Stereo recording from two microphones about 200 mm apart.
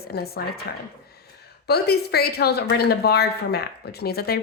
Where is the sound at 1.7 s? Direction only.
55° left (ahead or behind).